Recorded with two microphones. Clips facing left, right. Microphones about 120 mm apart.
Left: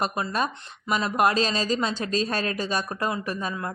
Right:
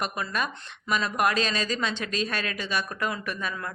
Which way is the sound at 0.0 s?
30° left (ahead or behind).